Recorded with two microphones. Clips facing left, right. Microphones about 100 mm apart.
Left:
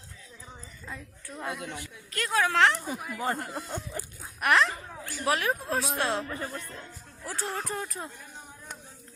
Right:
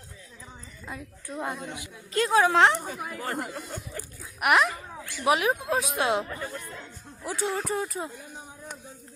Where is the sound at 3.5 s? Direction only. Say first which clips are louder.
Left 1 dB; 5° left (ahead or behind).